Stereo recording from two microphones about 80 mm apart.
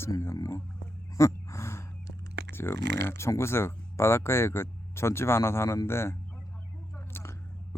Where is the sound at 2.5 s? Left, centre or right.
Left.